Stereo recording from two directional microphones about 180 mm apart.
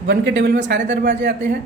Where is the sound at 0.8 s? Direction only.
45° right (ahead or behind).